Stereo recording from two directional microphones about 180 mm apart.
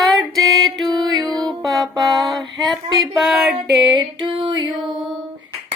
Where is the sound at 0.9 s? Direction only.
25° right (ahead or behind).